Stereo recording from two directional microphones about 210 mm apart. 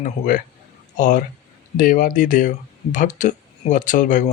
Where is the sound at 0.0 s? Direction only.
40° left (ahead or behind).